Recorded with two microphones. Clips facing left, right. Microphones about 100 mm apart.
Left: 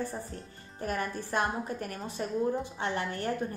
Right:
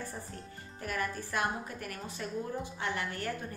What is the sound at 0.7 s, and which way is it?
A woman's voice, 30° left (ahead or behind).